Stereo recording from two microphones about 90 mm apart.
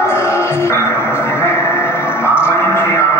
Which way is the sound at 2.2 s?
25° left (ahead or behind).